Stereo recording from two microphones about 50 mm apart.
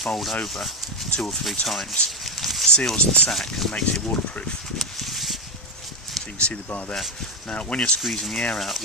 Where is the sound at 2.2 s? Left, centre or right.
Centre.